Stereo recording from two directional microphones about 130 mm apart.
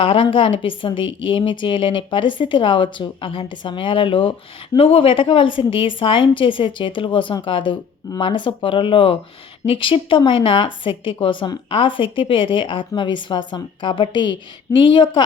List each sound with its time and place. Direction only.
0.0 s a woman's voice: 45° left (ahead or behind)